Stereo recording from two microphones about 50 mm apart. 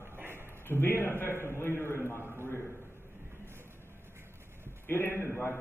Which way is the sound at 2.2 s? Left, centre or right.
Right.